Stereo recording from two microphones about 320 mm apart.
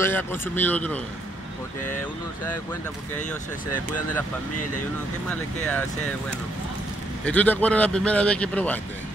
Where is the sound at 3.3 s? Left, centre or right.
Left.